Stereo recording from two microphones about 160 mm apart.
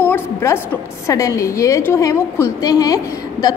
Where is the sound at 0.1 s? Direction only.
15° left (ahead or behind).